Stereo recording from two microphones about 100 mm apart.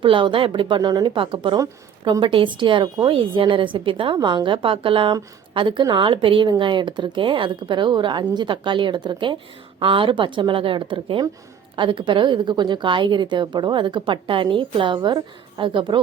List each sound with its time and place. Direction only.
0.0 s a woman's voice: 55° right (ahead or behind)